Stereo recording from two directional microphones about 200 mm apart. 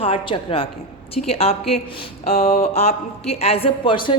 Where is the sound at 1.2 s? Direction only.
35° left (ahead or behind).